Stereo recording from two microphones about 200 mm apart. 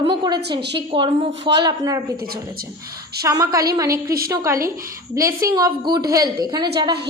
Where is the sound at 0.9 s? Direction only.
25° right (ahead or behind).